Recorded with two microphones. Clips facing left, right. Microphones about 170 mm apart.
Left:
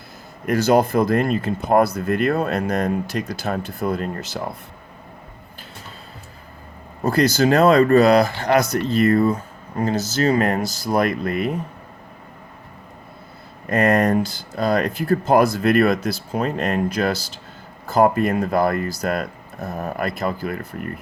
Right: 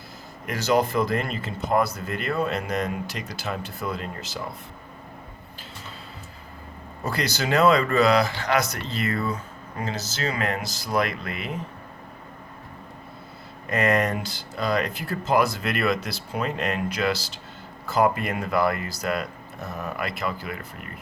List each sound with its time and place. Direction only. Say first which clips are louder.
0.4 s speech: left 6 dB; 50° left (ahead or behind)
7.0 s speech: left 10 dB; 50° left (ahead or behind)
13.7 s speech: left 5 dB; 50° left (ahead or behind)